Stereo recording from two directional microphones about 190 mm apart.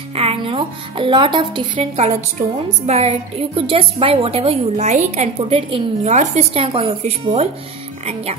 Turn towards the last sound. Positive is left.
turn(degrees=-30)  # may be behind; listen again after turning